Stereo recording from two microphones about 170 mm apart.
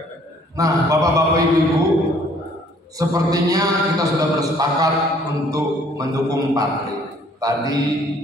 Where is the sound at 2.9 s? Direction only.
20° right (ahead or behind).